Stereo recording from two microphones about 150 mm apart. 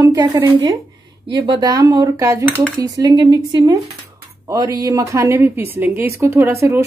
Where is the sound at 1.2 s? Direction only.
30° right (ahead or behind).